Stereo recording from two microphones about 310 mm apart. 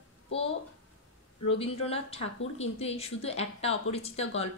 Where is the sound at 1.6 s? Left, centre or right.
Centre.